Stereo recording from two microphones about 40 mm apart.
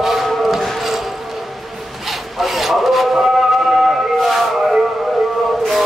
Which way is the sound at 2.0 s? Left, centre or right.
Centre.